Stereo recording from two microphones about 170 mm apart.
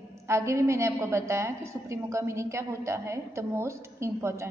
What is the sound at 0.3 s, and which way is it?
A woman's voice, 15° right (ahead or behind).